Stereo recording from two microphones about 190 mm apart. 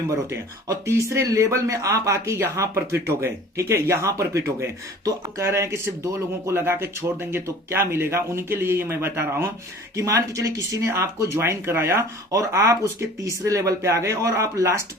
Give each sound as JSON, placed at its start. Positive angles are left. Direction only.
{"t": 0.3, "sound": "speech", "side_deg": -15}